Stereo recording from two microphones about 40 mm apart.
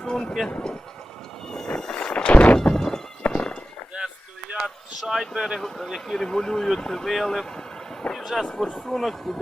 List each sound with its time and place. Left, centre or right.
0.0 s music: centre
1.5 s a sound: centre; by 2.6 s left
2.6 s thunk: centre
3.2 s walk: left
4.0 s a sound: right
4.5 s speech: centre
5.5 s a man's voice: centre
8.1 s vehicle: centre
8.4 s speech: centre
8.9 s a man's voice: centre